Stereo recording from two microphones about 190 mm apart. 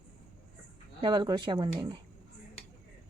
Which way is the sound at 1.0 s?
25° right (ahead or behind).